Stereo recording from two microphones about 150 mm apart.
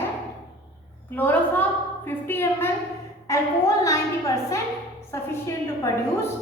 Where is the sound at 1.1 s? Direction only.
10° left (ahead or behind).